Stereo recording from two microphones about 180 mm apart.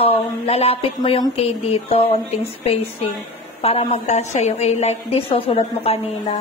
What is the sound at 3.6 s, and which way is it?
A woman's voice, 35° left (ahead or behind).